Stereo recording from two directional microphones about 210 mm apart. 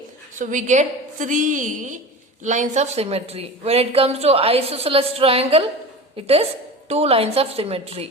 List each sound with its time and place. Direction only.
0.3 s a woman's voice: 35° right (ahead or behind)